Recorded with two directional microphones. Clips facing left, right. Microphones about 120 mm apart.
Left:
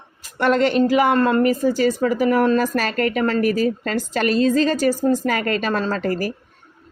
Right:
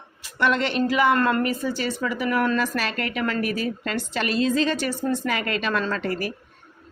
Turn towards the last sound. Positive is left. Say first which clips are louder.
# left 4 dB
turn(degrees=40)  # may be behind; listen again after turning